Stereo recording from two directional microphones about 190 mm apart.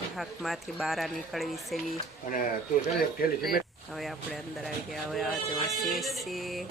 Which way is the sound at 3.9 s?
Centre (ahead or behind).